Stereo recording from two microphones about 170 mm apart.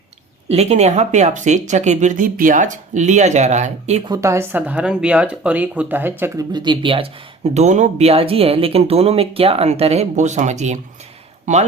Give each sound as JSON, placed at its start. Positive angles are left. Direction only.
{"t": 0.5, "sound": "speech", "side_deg": -40}
{"t": 4.1, "sound": "speech", "side_deg": -15}
{"t": 6.5, "sound": "speech", "side_deg": -25}